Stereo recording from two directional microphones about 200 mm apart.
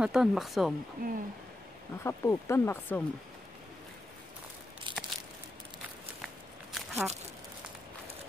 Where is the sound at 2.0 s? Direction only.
15° left (ahead or behind).